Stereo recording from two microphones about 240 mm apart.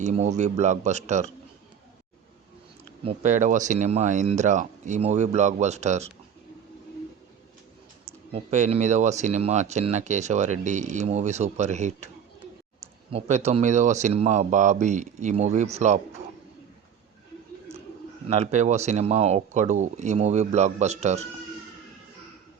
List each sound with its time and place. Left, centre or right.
0.0 s speech: right
3.0 s speech: right
8.0 s speech: right
18.3 s speech: right